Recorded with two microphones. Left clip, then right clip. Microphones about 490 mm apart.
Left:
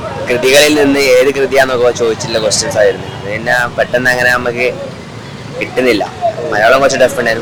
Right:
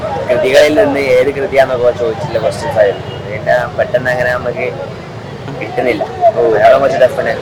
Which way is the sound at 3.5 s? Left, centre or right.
Left.